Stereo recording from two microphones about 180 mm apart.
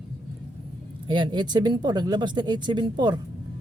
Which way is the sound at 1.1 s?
25° right (ahead or behind).